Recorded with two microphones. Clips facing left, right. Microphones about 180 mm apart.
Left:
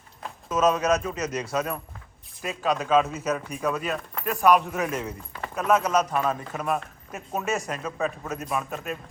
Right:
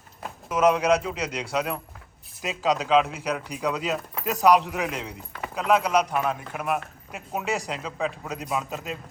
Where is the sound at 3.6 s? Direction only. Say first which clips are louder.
Right 1 dB; 20° right (ahead or behind).